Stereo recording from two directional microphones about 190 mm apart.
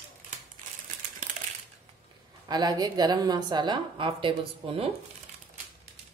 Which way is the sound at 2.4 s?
20° right (ahead or behind).